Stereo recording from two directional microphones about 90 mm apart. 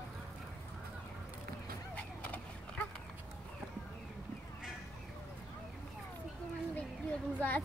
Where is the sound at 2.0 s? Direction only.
15° left (ahead or behind).